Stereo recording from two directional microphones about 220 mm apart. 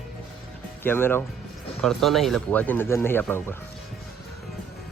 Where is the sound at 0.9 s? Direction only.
10° left (ahead or behind).